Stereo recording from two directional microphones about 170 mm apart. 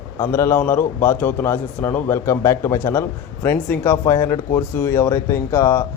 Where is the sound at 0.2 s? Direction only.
15° left (ahead or behind).